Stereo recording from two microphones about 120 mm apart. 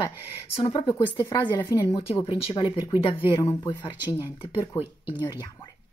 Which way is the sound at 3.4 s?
25° left (ahead or behind).